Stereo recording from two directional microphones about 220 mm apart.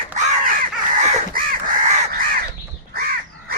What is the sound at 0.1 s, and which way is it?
Crow, 35° right (ahead or behind).